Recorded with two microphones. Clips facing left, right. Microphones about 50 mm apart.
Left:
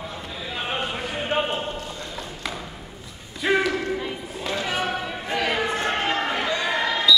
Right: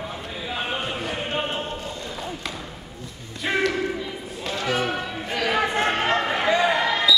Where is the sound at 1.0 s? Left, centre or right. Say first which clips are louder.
Even; centre.